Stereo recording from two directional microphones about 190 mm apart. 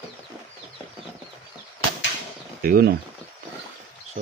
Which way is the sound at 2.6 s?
50° right (ahead or behind).